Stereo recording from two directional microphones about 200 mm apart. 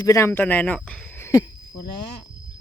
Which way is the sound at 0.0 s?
15° left (ahead or behind).